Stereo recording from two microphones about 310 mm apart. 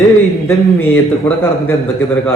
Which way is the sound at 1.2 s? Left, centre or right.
Centre.